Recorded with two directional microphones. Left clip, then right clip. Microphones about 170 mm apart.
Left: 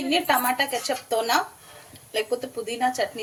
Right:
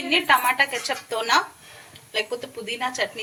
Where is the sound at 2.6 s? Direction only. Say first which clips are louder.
Left 1 dB; 35° left (ahead or behind).